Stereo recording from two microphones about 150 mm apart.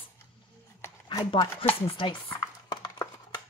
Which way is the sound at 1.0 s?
35° left (ahead or behind).